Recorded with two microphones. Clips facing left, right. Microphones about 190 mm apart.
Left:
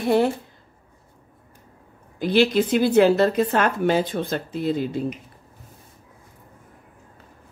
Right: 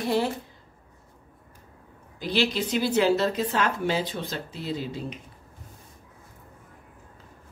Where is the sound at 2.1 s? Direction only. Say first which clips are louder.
Left 8 dB; 55° left (ahead or behind).